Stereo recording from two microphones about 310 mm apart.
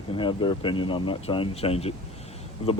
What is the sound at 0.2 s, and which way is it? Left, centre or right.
Speech, centre.